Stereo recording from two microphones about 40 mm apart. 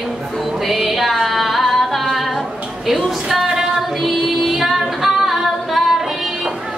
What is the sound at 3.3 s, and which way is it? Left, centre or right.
Female singing, centre.